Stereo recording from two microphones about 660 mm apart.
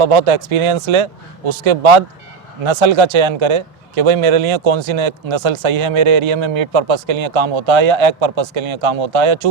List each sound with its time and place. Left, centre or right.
0.0 s a man's voice: right